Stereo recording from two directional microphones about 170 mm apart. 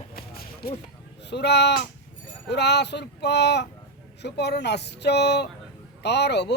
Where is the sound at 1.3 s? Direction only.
80° left.